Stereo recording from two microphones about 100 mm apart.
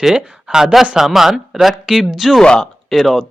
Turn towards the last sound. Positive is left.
turn(degrees=0)  # may be behind; listen again after turning